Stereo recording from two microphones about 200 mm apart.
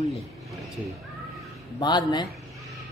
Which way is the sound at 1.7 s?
20° left (ahead or behind).